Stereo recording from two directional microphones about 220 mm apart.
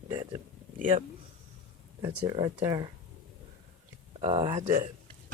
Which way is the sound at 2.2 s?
20° right (ahead or behind).